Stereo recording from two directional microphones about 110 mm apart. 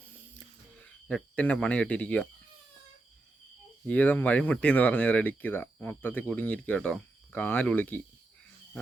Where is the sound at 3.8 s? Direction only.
15° left (ahead or behind).